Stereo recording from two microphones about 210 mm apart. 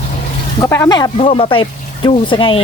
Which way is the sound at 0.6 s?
15° left (ahead or behind).